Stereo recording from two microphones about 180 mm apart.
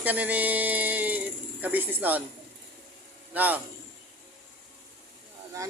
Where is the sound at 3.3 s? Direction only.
10° right (ahead or behind).